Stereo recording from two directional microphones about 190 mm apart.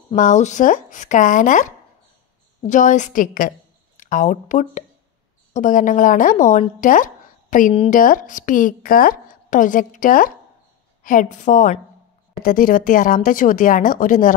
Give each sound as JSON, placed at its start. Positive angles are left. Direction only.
{"t": 0.1, "sound": "a woman's voice", "side_deg": 40}